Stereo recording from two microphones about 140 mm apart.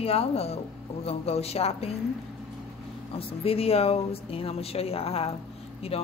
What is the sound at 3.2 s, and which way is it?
A woman's voice, 45° left (ahead or behind).